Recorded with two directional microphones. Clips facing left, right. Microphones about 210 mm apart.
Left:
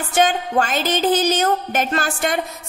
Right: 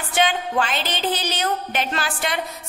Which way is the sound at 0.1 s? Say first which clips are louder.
Left 3 dB; 45° left (ahead or behind).